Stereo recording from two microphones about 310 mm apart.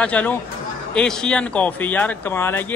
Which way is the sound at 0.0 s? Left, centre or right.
Centre.